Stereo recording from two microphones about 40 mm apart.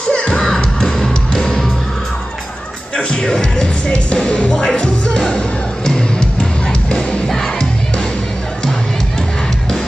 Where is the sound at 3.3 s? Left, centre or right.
Centre.